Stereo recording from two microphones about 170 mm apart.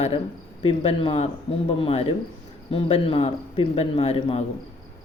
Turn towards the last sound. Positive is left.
turn(degrees=35)  # may be behind; listen again after turning